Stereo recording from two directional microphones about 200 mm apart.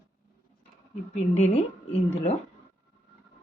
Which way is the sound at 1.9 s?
35° left (ahead or behind).